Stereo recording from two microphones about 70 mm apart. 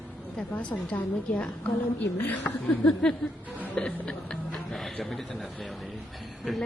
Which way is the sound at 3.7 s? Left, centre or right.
Centre.